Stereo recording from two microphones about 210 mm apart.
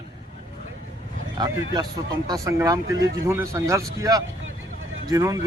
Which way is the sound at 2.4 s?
15° right (ahead or behind).